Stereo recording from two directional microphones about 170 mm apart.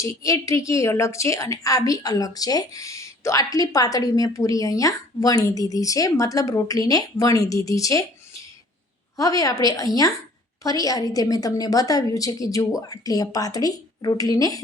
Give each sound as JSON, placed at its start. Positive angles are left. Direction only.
{"t": 0.0, "sound": "a woman's voice", "side_deg": 20}
{"t": 9.1, "sound": "a woman's voice", "side_deg": 20}